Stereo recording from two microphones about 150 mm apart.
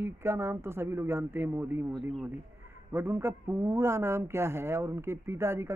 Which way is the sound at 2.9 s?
15° right (ahead or behind).